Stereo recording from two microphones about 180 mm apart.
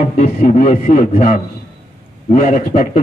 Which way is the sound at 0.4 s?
45° left (ahead or behind).